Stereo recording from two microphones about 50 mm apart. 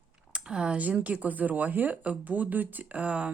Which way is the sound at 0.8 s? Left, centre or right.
Right.